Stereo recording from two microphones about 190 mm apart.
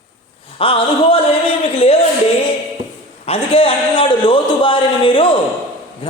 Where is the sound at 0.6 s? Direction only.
30° left (ahead or behind).